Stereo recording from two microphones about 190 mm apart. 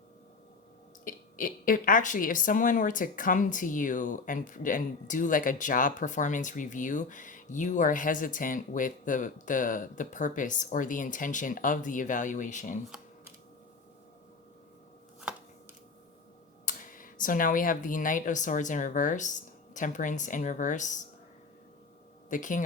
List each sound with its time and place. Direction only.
1.0 s speech: 45° left (ahead or behind)
16.6 s speech: 45° left (ahead or behind)
22.3 s speech: 45° left (ahead or behind)